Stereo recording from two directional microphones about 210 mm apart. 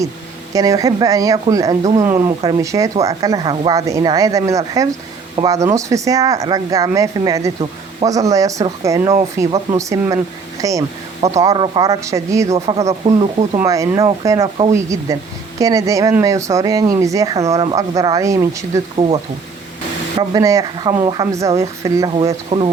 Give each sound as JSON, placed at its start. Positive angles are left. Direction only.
{"t": 0.5, "sound": "speech", "side_deg": -15}
{"t": 13.6, "sound": "speech", "side_deg": -15}
{"t": 20.1, "sound": "speech", "side_deg": -15}